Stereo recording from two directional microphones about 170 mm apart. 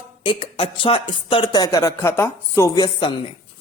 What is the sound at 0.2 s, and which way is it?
Speech, 30° left (ahead or behind).